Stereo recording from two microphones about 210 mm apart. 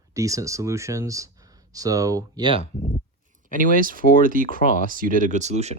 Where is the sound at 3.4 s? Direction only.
40° right (ahead or behind).